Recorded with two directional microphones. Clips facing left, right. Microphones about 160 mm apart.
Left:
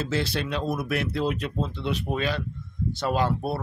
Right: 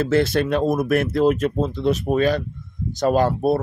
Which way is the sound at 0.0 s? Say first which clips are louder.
Right 9 dB; 50° right (ahead or behind).